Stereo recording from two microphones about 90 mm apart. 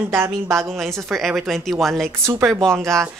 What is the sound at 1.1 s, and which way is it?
A woman's voice, centre (ahead or behind).